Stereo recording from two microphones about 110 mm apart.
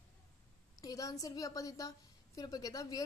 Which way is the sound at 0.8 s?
30° left (ahead or behind).